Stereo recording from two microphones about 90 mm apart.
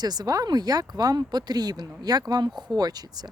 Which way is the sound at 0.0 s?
45° right (ahead or behind).